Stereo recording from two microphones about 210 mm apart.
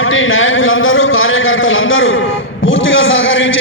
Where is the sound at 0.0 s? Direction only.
70° left (ahead or behind).